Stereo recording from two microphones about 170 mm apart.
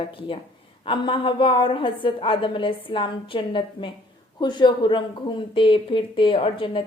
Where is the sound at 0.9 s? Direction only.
30° left (ahead or behind).